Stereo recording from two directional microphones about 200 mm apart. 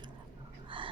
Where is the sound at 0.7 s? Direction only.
25° right (ahead or behind).